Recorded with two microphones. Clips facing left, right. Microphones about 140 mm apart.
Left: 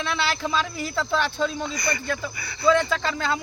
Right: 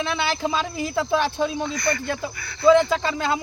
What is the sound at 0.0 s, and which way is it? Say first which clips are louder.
Speech: right 2 dB; 20° right (ahead or behind).